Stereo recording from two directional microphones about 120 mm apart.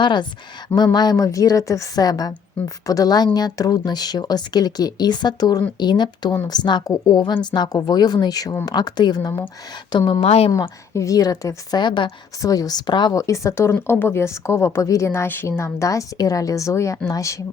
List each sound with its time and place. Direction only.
0.0 s speech: 40° left (ahead or behind)
10.0 s speech: 55° left (ahead or behind)
10.5 s speech: 25° left (ahead or behind)
12.4 s speech: 30° left (ahead or behind)